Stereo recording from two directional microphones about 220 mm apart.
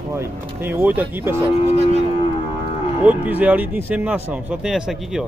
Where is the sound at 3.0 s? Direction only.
5° right (ahead or behind).